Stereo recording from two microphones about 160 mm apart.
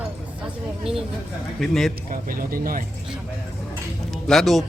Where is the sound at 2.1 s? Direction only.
60° right (ahead or behind).